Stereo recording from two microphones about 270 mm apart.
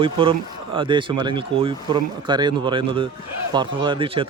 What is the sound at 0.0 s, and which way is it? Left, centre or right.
A man's voice, centre.